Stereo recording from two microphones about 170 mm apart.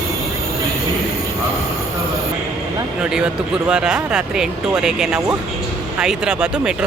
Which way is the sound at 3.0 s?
5° right (ahead or behind).